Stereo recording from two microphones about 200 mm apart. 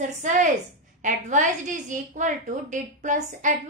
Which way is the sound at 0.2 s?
40° right (ahead or behind).